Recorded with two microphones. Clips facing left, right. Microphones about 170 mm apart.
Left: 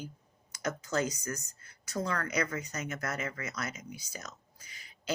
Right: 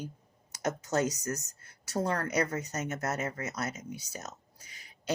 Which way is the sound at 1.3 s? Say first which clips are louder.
Right 3 dB; 80° right.